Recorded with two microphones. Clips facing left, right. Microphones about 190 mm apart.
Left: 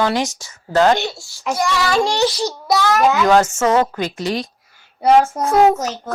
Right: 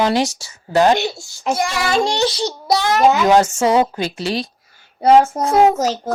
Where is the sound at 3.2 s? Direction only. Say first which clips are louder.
Right 1 dB; 15° right (ahead or behind).